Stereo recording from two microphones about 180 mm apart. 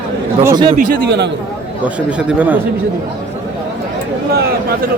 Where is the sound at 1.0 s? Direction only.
70° right (ahead or behind).